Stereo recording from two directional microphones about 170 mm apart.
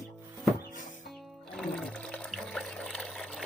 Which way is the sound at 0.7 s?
50° left (ahead or behind).